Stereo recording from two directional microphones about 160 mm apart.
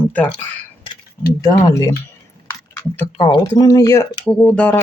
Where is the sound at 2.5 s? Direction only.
15° left (ahead or behind).